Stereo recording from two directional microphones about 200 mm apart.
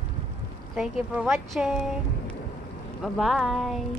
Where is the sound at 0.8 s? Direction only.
5° right (ahead or behind).